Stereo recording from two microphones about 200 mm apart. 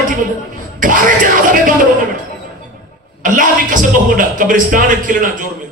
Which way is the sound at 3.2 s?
40° right (ahead or behind).